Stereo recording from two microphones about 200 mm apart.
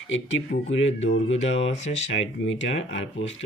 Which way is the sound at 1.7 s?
35° left (ahead or behind).